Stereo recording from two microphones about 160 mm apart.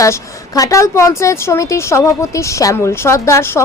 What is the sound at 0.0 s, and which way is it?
Speech, 20° left (ahead or behind).